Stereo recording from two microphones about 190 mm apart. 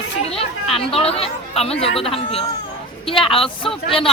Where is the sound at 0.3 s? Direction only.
30° left (ahead or behind).